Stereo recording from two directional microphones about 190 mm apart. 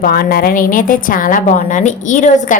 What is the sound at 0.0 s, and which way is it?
A woman's voice, 50° left (ahead or behind).